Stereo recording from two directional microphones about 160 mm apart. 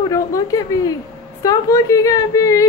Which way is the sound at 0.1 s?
20° left (ahead or behind).